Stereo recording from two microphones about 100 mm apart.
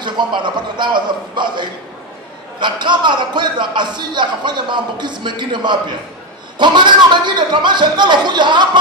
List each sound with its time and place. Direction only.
0.0 s speech: 50° right (ahead or behind)